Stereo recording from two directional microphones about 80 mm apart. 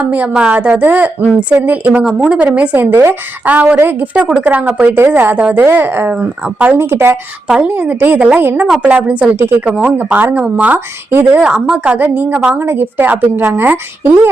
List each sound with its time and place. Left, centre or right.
0.0 s a woman's voice: centre
3.4 s a woman's voice: centre
6.7 s a woman's voice: right
7.4 s speech: centre
7.7 s a woman's voice: right
8.6 s a woman's voice: centre
8.9 s a woman's voice: centre
11.1 s a woman's voice: right
11.3 s a woman's voice: centre